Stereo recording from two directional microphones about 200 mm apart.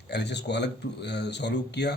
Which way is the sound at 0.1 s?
60° left (ahead or behind).